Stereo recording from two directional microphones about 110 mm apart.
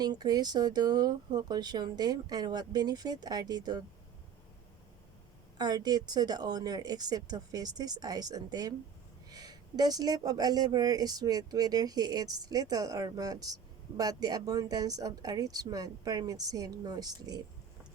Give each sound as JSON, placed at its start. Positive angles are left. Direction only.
{"t": 0.0, "sound": "speech", "side_deg": -40}
{"t": 5.5, "sound": "speech", "side_deg": -40}